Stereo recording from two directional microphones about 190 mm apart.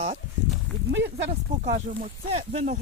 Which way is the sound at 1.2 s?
40° right (ahead or behind).